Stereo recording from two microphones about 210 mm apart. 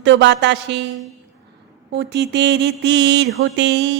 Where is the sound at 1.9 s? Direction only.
55° right (ahead or behind).